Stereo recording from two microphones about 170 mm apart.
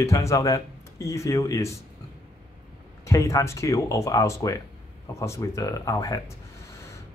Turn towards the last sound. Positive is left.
turn(degrees=20)  # may be behind; listen again after turning